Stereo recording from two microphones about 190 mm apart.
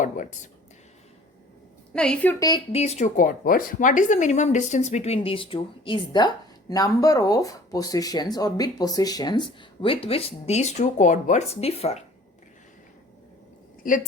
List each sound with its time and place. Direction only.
0.0 s a sound: 40° left (ahead or behind)
1.9 s a woman's voice: 5° left (ahead or behind)
2.7 s speech: 35° left (ahead or behind)